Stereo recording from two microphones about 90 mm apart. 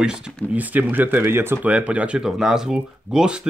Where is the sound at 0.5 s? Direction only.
20° right (ahead or behind).